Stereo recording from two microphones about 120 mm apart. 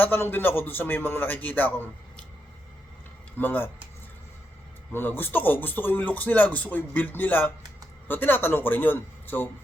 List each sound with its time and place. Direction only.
0.0 s speech: 15° left (ahead or behind)
3.3 s speech: 15° left (ahead or behind)
4.9 s speech: 15° left (ahead or behind)